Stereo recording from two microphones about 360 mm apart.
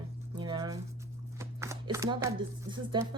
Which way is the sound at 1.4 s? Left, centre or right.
Centre.